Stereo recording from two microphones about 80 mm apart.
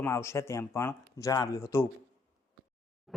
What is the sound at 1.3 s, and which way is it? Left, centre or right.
Speech, left.